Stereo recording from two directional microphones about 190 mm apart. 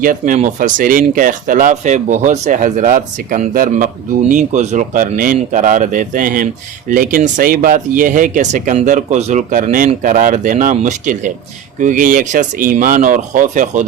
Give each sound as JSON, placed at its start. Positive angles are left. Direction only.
{"t": 0.0, "sound": "speech", "side_deg": -45}